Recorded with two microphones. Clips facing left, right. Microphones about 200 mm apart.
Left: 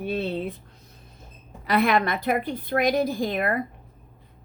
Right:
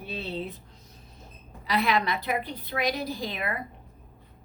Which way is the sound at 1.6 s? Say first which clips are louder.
Left 4 dB; 55° left (ahead or behind).